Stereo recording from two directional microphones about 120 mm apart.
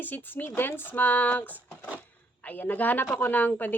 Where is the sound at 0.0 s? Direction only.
15° left (ahead or behind).